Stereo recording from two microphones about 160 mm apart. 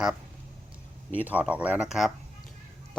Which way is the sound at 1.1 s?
10° right (ahead or behind).